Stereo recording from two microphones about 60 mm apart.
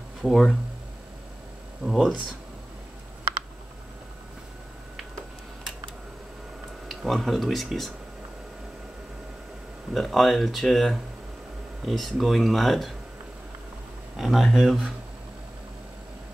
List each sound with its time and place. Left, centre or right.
0.2 s speech: centre
1.9 s speech: centre
6.9 s speech: centre
9.9 s speech: centre
14.1 s speech: centre